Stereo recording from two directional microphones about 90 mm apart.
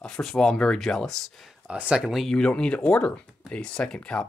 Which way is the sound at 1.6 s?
15° right (ahead or behind).